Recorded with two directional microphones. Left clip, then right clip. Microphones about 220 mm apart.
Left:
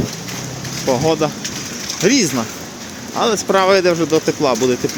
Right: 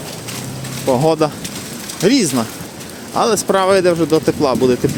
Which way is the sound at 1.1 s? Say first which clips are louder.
Right 2 dB; 25° right (ahead or behind).